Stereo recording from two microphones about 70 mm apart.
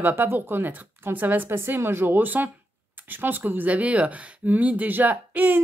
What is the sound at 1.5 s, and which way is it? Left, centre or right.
Speech, right.